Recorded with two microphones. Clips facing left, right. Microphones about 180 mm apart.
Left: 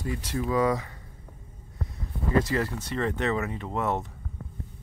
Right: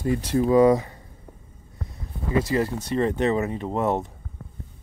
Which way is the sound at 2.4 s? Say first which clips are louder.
Right 4 dB; 15° right (ahead or behind).